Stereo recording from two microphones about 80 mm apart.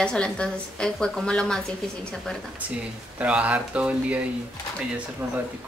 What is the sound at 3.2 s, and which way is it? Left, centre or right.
Speech, centre.